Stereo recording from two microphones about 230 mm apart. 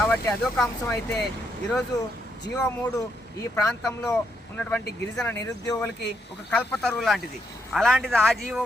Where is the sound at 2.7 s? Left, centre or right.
Centre.